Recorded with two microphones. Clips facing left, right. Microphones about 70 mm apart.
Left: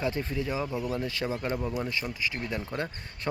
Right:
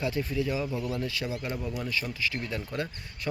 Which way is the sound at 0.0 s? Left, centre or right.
Left.